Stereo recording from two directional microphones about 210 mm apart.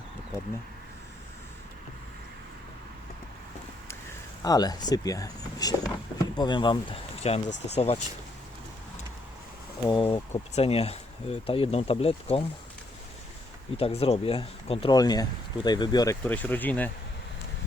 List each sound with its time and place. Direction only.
4.4 s speech: 15° left (ahead or behind)
9.8 s speech: 25° left (ahead or behind)
13.7 s speech: 25° left (ahead or behind); by 16.9 s 10° left (ahead or behind)